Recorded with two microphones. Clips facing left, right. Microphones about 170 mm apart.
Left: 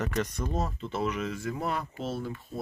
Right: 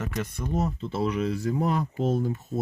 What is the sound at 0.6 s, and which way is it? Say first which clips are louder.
Speech: right 4 dB; 30° right (ahead or behind).